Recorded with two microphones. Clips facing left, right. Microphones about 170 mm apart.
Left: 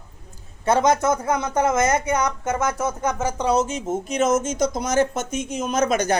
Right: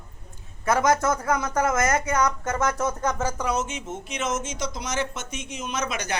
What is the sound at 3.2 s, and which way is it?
Speech, 25° left (ahead or behind).